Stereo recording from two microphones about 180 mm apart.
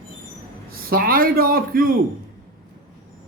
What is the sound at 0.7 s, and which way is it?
A man's voice, 55° right (ahead or behind).